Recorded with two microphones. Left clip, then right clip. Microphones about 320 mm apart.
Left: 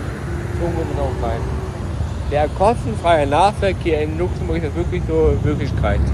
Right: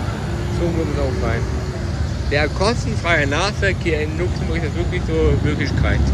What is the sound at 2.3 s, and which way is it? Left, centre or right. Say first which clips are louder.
Speech: left 3 dB; centre.